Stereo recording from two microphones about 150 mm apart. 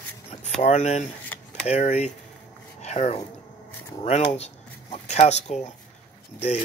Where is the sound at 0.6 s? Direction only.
50° left (ahead or behind).